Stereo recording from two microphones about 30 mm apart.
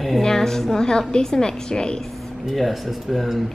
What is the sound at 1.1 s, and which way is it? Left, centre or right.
Speech, left.